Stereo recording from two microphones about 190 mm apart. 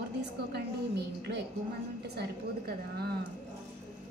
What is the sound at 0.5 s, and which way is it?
Speech, 60° right (ahead or behind).